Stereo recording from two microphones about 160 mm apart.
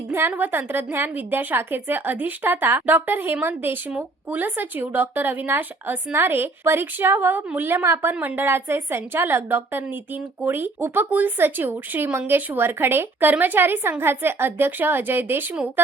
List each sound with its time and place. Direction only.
0.1 s a woman's voice: 15° right (ahead or behind)